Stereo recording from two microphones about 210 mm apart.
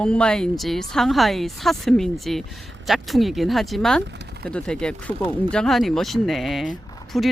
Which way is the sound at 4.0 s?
55° right (ahead or behind).